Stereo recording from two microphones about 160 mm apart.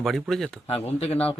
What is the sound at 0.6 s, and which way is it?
Speech, 40° left (ahead or behind).